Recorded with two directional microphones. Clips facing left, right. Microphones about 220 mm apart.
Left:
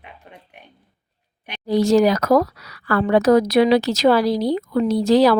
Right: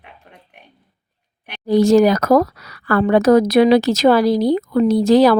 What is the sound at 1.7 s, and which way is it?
Speech, 50° right (ahead or behind).